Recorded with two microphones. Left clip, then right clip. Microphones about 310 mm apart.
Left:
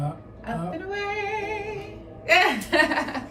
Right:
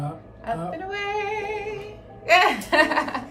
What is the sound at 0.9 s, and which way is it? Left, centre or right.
A woman's voice, centre.